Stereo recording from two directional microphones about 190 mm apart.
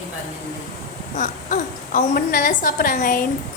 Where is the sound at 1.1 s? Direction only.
40° left (ahead or behind).